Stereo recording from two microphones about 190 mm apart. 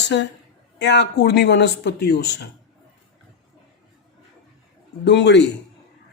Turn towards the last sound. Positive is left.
turn(degrees=70)  # may be behind; listen again after turning